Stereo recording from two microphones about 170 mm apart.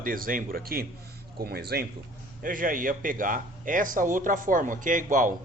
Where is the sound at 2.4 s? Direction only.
55° right (ahead or behind).